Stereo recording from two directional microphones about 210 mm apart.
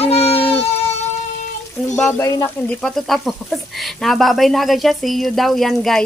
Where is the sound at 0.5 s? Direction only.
30° left (ahead or behind).